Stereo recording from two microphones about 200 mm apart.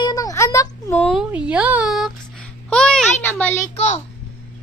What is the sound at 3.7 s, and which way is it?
Speech, 35° left (ahead or behind).